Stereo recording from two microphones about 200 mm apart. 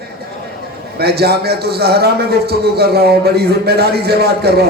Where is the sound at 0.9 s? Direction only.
55° right (ahead or behind).